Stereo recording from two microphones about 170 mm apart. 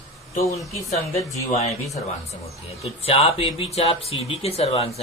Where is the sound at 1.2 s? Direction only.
20° left (ahead or behind).